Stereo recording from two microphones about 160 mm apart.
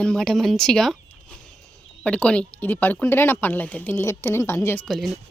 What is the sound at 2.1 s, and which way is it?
Speech, 5° left (ahead or behind).